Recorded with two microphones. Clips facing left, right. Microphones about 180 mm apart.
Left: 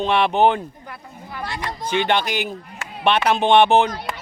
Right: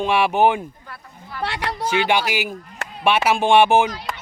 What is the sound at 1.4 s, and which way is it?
Speech, 70° right (ahead or behind).